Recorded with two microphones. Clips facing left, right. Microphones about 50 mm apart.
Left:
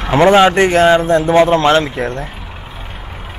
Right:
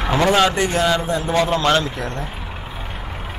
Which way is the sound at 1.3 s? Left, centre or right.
Left.